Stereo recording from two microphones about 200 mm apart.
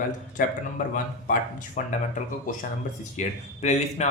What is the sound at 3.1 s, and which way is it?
Speech, 35° left (ahead or behind).